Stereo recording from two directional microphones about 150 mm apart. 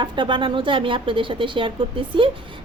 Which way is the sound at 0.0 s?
30° right (ahead or behind).